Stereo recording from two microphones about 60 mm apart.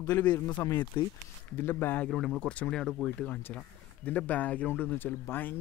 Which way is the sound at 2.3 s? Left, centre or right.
Left.